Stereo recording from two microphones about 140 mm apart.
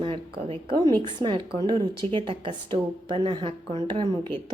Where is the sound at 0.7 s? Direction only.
30° right (ahead or behind).